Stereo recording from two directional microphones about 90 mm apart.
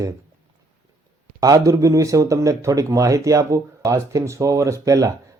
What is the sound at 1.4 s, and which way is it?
Speech, 40° right (ahead or behind).